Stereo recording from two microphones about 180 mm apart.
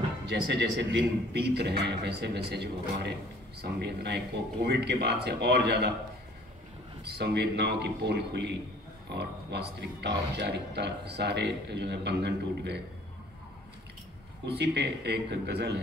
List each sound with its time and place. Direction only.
0.3 s speech: 75° right (ahead or behind)
7.1 s speech: 65° right (ahead or behind)
14.4 s speech: 70° right (ahead or behind)